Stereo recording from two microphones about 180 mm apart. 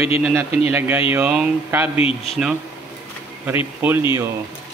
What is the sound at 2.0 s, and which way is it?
Speech, 35° left (ahead or behind).